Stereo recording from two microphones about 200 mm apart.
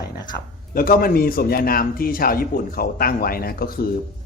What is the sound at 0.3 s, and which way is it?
A man's voice, 45° left (ahead or behind).